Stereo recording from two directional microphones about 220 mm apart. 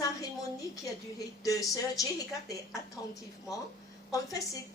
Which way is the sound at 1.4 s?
15° left (ahead or behind).